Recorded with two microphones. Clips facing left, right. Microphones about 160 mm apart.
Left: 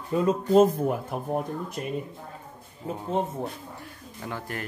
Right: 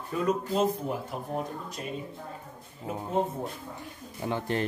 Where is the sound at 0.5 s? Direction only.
50° left (ahead or behind).